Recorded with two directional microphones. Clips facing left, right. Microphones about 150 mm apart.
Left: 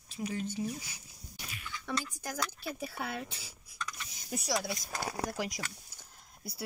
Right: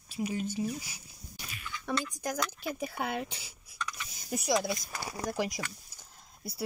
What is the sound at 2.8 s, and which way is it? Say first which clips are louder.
Speech: right 5 dB; 50° right (ahead or behind).